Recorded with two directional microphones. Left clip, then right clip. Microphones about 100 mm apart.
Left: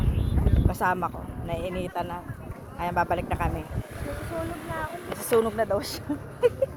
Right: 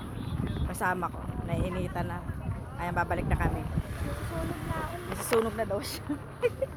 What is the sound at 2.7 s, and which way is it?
Speech, 5° right (ahead or behind).